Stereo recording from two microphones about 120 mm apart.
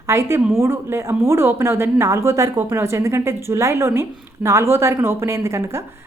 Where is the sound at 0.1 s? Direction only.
20° right (ahead or behind).